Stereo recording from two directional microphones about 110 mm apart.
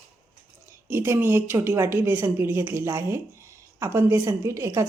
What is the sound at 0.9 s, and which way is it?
Speech, 20° right (ahead or behind).